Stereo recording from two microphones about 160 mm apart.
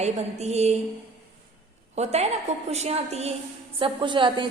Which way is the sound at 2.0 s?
40° right (ahead or behind).